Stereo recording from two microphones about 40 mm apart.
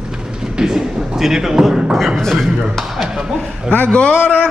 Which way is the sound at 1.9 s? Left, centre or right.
Centre.